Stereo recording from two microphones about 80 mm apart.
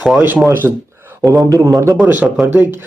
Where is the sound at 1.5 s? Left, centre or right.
Right.